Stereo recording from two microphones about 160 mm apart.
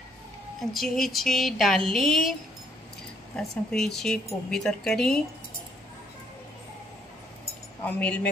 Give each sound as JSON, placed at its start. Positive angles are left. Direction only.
{"t": 0.6, "sound": "speech", "side_deg": 0}
{"t": 3.3, "sound": "speech", "side_deg": 0}
{"t": 7.8, "sound": "speech", "side_deg": 10}